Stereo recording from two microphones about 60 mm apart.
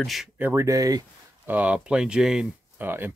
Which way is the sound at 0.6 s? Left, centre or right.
Right.